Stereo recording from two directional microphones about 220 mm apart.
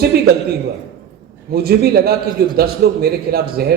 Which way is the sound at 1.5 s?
45° right (ahead or behind).